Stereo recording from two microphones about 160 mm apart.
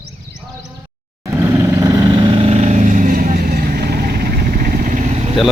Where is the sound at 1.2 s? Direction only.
20° right (ahead or behind); by 5.3 s 45° right (ahead or behind).